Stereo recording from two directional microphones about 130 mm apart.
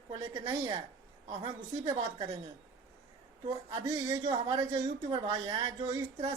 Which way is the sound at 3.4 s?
35° right (ahead or behind).